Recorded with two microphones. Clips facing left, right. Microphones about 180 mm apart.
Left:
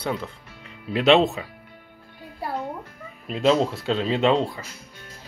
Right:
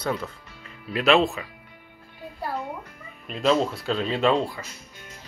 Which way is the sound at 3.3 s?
25° left (ahead or behind).